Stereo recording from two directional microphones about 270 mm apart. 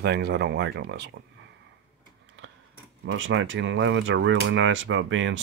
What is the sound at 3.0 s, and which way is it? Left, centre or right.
Speech, right.